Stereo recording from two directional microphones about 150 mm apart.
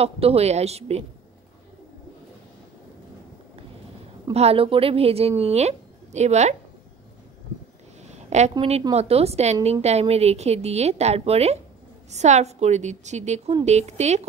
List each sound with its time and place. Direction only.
0.0 s a woman's voice: 40° right (ahead or behind)
4.3 s a woman's voice: 45° right (ahead or behind)
8.0 s a sound: 50° right (ahead or behind)
8.9 s a woman's voice: 45° right (ahead or behind)